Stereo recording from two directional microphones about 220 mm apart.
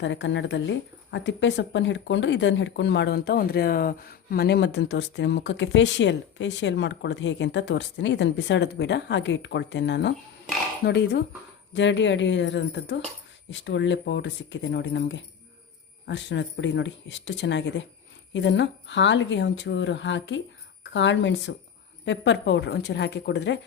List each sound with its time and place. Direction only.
0.0 s speech: 55° left (ahead or behind)